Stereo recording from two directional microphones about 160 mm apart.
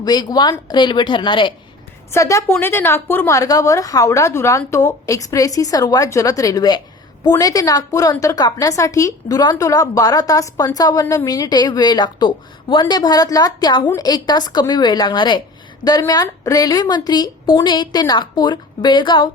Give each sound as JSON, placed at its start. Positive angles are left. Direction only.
{"t": 0.0, "sound": "a woman's voice", "side_deg": 25}
{"t": 2.0, "sound": "a woman's voice", "side_deg": 20}
{"t": 11.0, "sound": "a woman's voice", "side_deg": 15}
{"t": 11.3, "sound": "a woman's voice", "side_deg": 25}